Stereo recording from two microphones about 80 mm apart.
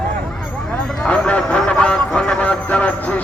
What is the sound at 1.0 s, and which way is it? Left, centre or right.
Speech, centre.